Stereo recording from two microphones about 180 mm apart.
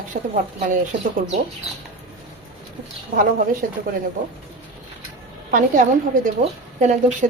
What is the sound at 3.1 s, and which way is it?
Speech, 45° right (ahead or behind).